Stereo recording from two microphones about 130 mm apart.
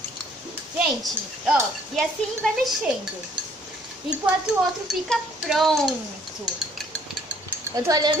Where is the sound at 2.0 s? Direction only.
Centre (ahead or behind).